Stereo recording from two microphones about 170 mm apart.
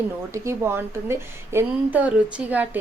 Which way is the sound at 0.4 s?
15° right (ahead or behind).